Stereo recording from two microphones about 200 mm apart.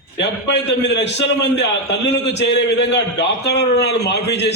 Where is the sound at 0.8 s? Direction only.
55° left (ahead or behind).